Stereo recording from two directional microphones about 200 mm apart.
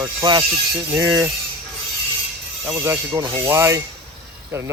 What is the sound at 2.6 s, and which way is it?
Speech, 10° right (ahead or behind).